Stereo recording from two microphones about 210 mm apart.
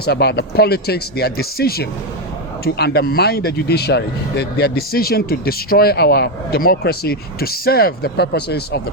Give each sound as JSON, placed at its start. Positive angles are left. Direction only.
{"t": 0.0, "sound": "speech", "side_deg": 50}